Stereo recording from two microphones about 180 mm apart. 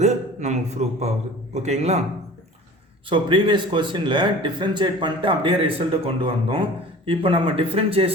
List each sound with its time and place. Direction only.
0.0 s a man's voice: 40° right (ahead or behind)
3.1 s a man's voice: 25° right (ahead or behind)